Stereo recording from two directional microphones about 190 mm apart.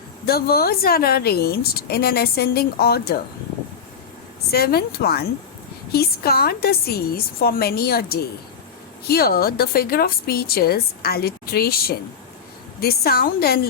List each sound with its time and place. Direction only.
0.3 s a woman's voice: 55° left (ahead or behind)
4.5 s a woman's voice: 55° left (ahead or behind)